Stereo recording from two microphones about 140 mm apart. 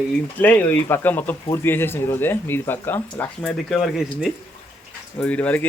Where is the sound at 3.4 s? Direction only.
Centre (ahead or behind).